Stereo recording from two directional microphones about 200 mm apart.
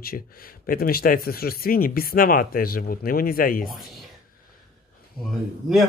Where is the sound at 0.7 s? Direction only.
50° left (ahead or behind).